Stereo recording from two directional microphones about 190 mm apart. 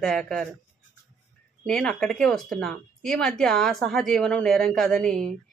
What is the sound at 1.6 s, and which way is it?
Speech, 5° left (ahead or behind).